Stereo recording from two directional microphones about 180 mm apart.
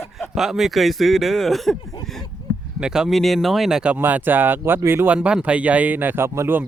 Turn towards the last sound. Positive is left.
turn(degrees=-10)  # may be behind; listen again after turning